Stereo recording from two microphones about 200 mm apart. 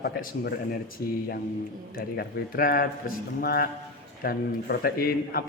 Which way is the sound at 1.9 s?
50° left (ahead or behind).